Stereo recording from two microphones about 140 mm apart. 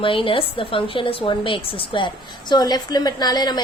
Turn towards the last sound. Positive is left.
turn(degrees=30)  # may be behind; listen again after turning